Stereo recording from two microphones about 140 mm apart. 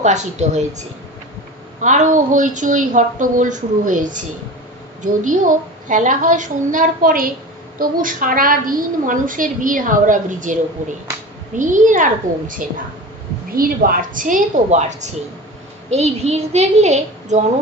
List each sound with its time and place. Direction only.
0.0 s a woman's voice: 55° right (ahead or behind)
1.8 s a woman's voice: 65° right (ahead or behind)
13.5 s a woman's voice: 90° right; by 17.4 s 55° right (ahead or behind)